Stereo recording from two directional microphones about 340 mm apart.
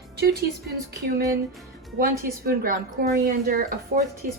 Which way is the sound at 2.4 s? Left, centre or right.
Right.